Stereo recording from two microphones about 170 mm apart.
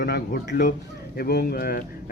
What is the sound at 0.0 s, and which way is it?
Speech, 70° left (ahead or behind).